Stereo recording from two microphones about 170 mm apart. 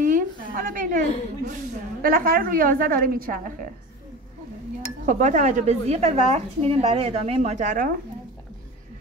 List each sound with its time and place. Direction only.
0.0 s a woman's voice: 50° right (ahead or behind)
5.0 s a woman's voice: 45° right (ahead or behind)